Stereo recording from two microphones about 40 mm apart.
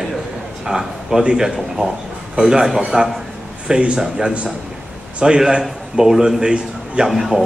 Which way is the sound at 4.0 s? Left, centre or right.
Centre.